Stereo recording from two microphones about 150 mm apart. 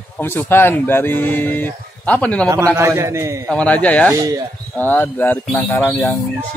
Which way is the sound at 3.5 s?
10° left (ahead or behind).